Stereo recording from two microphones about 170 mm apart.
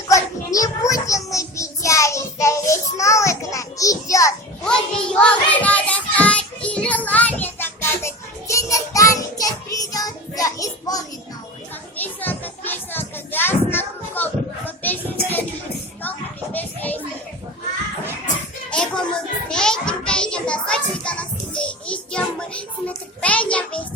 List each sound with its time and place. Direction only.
0.1 s child singing: 20° left (ahead or behind)
5.1 s child singing: 5° left (ahead or behind)
11.9 s children playing: 10° left (ahead or behind)
18.7 s music: 5° left (ahead or behind)
19.5 s child singing: 5° left (ahead or behind)
23.2 s a sound: 10° left (ahead or behind)